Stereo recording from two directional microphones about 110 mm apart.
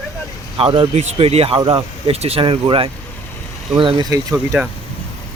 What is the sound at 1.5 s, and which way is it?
Speech, 55° right (ahead or behind).